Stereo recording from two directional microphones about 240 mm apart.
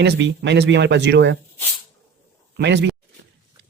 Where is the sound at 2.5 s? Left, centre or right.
Right.